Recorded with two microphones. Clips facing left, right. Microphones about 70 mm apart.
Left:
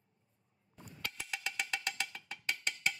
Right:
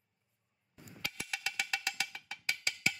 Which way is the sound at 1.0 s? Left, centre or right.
Centre.